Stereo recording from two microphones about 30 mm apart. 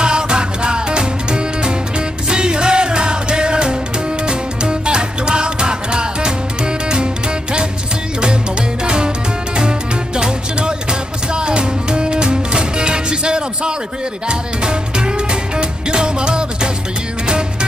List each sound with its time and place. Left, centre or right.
0.0 s music: right
8.8 s music: right
15.5 s music: right